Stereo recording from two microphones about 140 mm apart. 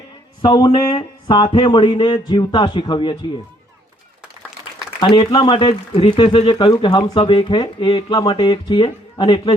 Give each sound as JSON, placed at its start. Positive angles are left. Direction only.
{"t": 0.4, "sound": "speech", "side_deg": 30}
{"t": 4.9, "sound": "speech", "side_deg": 35}